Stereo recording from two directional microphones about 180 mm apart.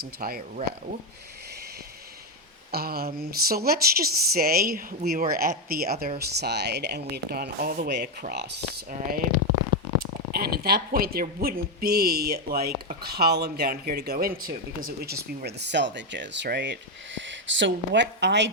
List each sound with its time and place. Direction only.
0.0 s speech: 55° right (ahead or behind)
2.7 s speech: 55° right (ahead or behind)
9.0 s speech: 50° right (ahead or behind)
10.3 s speech: 55° right (ahead or behind); by 16.7 s 75° right (ahead or behind)
17.2 s speech: 90° right; by 18.5 s 75° right (ahead or behind)